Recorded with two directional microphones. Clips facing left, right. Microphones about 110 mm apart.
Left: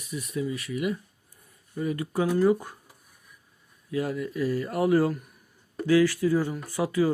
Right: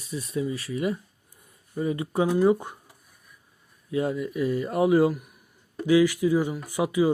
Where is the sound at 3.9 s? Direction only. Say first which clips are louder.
Right 2 dB; 20° right (ahead or behind).